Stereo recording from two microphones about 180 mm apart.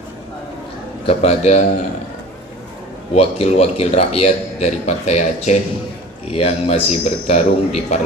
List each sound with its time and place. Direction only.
1.0 s a man's voice: 35° left (ahead or behind)
3.2 s a man's voice: 35° left (ahead or behind)